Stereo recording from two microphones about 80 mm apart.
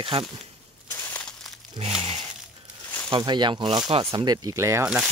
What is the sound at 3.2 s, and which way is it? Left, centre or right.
Speech, right.